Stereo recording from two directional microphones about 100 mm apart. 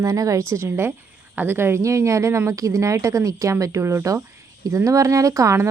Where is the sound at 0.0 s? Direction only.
35° right (ahead or behind).